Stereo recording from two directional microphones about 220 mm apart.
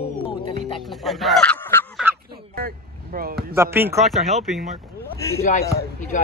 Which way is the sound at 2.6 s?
40° right (ahead or behind).